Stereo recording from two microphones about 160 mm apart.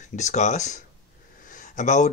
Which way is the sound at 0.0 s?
50° left (ahead or behind).